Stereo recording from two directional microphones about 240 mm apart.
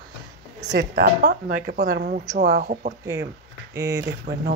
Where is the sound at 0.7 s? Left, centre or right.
Right.